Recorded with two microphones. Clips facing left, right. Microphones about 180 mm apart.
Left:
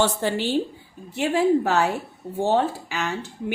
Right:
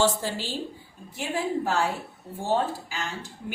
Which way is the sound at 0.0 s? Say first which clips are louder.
Left 3 dB; 65° left (ahead or behind).